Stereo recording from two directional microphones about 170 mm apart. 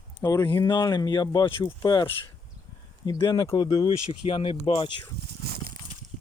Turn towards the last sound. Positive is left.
turn(degrees=-70)  # may be behind; listen again after turning